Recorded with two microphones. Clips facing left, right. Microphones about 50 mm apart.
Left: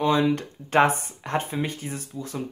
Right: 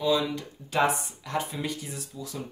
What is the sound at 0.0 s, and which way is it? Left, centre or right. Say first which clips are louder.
Speech: left 4 dB; left.